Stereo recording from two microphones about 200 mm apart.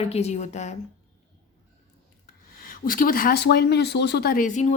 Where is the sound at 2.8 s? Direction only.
45° left (ahead or behind).